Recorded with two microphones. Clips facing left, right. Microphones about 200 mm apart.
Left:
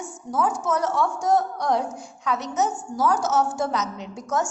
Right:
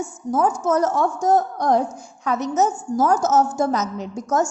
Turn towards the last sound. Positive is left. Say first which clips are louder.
# right 5 dB
turn(degrees=-40)  # may be behind; listen again after turning